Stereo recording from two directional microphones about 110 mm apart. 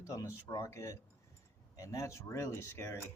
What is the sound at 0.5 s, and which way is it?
Speech, 30° left (ahead or behind).